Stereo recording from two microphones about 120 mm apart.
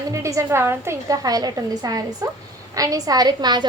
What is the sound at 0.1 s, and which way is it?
A woman's voice, 25° right (ahead or behind).